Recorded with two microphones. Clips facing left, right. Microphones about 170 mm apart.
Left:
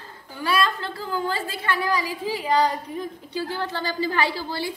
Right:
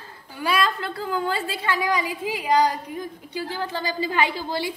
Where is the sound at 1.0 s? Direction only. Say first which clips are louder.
Right 1 dB; 20° right (ahead or behind).